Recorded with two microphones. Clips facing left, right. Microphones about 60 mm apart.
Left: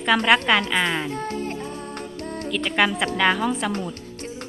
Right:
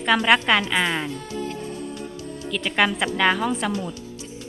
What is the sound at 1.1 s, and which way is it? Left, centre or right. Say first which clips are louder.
Music: left 2 dB; left.